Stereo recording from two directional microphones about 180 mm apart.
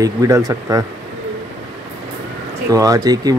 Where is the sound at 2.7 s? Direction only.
20° right (ahead or behind).